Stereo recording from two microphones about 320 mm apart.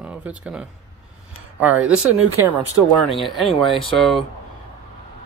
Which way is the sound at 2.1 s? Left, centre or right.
Right.